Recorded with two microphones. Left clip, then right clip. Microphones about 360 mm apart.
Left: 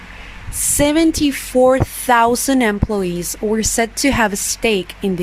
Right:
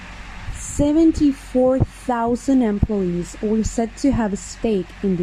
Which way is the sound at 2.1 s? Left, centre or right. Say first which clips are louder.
Left 7 dB; left.